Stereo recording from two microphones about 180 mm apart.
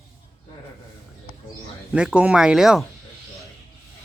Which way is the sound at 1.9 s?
5° right (ahead or behind).